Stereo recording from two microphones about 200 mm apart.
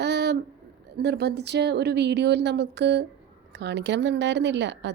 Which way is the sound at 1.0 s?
55° right (ahead or behind).